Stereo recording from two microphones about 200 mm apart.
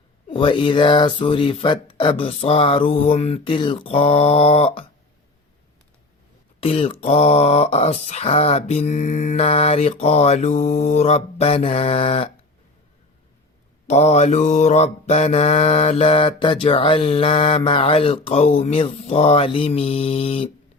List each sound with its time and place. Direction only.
0.3 s mantra: 25° left (ahead or behind)
6.6 s mantra: 30° left (ahead or behind)
7.0 s a sound: 35° left (ahead or behind)
13.8 s mantra: 35° left (ahead or behind)